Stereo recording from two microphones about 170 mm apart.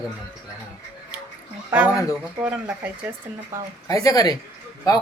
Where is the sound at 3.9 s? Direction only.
20° left (ahead or behind).